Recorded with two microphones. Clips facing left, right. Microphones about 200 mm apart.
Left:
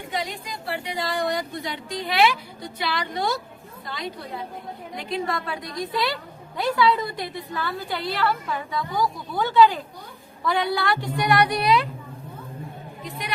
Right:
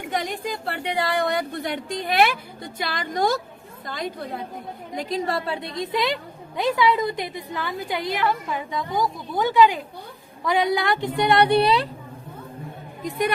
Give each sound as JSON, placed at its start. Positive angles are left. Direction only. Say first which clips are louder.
{"t": 0.1, "sound": "speech", "louder": "right 4 dB", "side_deg": -50}
{"t": 4.9, "sound": "a woman's voice", "louder": "right 2 dB", "side_deg": -40}
{"t": 5.5, "sound": "a woman's voice", "louder": "right 3 dB", "side_deg": -25}
{"t": 13.0, "sound": "speech", "louder": "right 12 dB", "side_deg": -50}